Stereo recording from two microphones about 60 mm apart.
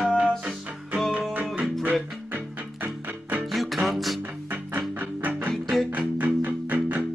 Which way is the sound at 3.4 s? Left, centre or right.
Centre.